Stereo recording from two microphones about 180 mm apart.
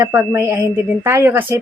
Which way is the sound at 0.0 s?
15° right (ahead or behind).